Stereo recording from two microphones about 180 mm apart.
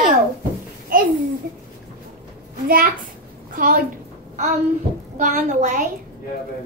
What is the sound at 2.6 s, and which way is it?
A woman's voice, 50° right (ahead or behind).